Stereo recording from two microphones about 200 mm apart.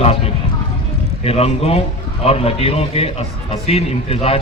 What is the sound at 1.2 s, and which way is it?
A man's voice, 30° left (ahead or behind).